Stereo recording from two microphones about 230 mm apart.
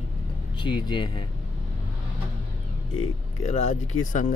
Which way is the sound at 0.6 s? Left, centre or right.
Centre.